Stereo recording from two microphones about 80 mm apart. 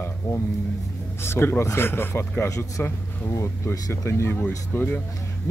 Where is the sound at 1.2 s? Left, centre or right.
Left.